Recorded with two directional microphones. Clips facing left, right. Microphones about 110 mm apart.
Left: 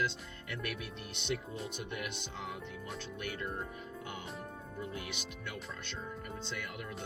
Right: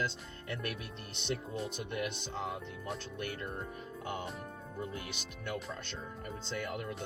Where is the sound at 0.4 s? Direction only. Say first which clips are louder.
Right 1 dB; 35° right (ahead or behind).